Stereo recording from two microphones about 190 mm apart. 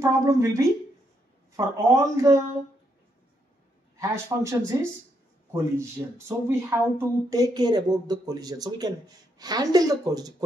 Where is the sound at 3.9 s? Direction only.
15° right (ahead or behind).